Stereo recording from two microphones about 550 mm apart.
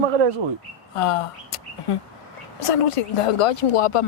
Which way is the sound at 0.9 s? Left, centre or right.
Left.